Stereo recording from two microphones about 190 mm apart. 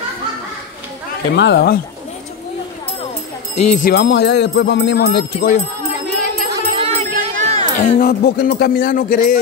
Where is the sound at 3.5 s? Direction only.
35° left (ahead or behind).